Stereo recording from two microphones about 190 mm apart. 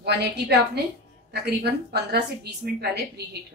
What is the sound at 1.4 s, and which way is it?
Speech, 60° right (ahead or behind).